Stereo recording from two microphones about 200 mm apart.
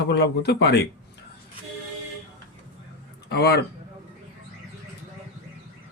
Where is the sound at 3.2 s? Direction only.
55° left (ahead or behind).